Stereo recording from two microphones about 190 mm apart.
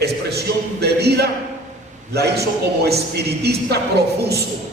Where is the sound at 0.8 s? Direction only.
60° right (ahead or behind).